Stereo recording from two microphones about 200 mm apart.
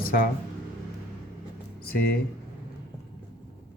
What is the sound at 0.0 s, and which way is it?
Speech, 45° left (ahead or behind).